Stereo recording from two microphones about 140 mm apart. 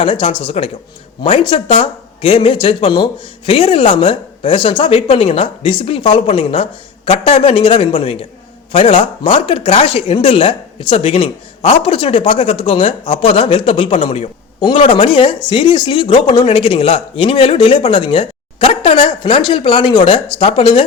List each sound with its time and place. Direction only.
0.0 s speech: 40° left (ahead or behind)